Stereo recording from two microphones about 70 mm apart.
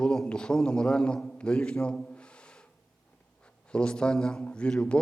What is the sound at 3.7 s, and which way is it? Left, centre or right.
A man's voice, centre.